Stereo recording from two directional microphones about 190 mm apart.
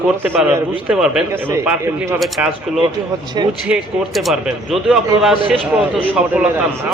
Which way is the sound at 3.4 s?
25° right (ahead or behind).